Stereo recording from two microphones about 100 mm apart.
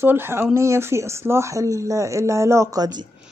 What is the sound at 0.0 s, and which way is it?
Speech, 20° right (ahead or behind).